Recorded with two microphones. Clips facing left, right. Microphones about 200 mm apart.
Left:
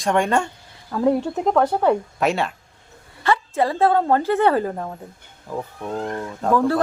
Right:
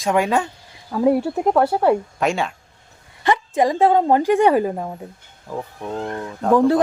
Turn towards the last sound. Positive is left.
turn(degrees=-15)  # may be behind; listen again after turning